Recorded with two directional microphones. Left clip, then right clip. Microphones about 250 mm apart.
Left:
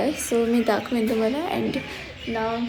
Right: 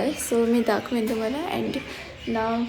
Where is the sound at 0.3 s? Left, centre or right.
Centre.